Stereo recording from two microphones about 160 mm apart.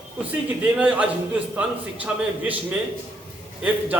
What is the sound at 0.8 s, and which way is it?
Speech, 10° right (ahead or behind).